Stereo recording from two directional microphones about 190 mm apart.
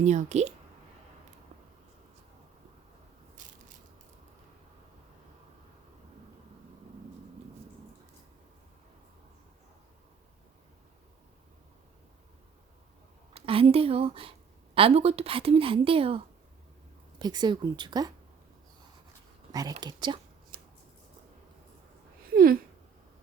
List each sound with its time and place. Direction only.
0.0 s speech: 40° right (ahead or behind)
13.3 s a woman's voice: 30° right (ahead or behind)
19.5 s a woman's voice: 20° right (ahead or behind)